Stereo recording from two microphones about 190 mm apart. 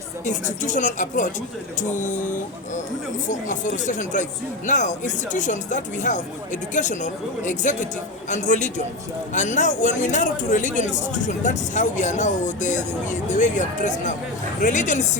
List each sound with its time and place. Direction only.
0.3 s speech: 40° left (ahead or behind)